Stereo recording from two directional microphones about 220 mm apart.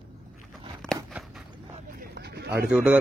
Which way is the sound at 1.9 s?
45° right (ahead or behind).